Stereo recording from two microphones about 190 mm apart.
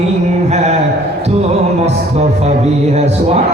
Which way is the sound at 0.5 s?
35° right (ahead or behind).